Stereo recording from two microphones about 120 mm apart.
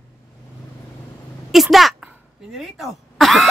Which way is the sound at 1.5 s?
Centre (ahead or behind).